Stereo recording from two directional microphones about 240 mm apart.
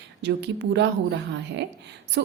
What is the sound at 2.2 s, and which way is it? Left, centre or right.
Speech, right.